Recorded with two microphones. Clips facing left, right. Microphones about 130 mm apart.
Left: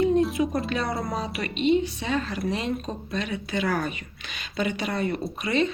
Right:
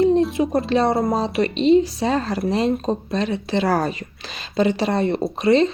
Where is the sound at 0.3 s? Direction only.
30° right (ahead or behind).